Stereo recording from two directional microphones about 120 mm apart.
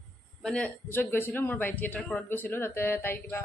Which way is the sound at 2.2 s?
15° left (ahead or behind).